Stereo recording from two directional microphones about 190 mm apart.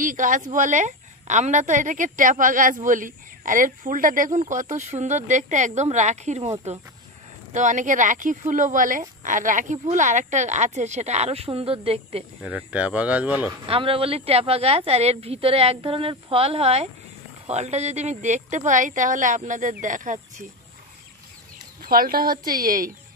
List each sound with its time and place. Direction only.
0.0 s a woman's voice: 45° right (ahead or behind)
7.5 s a woman's voice: 40° right (ahead or behind)
12.4 s speech: 5° right (ahead or behind)
13.7 s a woman's voice: 30° right (ahead or behind)
21.8 s a woman's voice: 50° right (ahead or behind)